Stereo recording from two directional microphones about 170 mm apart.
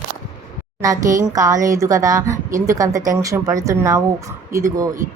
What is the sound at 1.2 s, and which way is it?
Speech, 20° right (ahead or behind).